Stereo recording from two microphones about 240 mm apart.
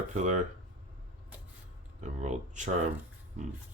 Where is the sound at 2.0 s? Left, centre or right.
Right.